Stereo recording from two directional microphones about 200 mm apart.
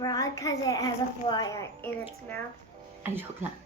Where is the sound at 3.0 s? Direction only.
10° right (ahead or behind).